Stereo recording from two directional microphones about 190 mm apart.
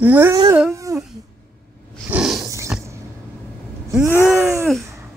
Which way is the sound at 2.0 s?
5° right (ahead or behind).